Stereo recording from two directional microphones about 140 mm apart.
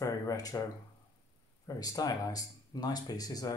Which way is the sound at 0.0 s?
25° left (ahead or behind).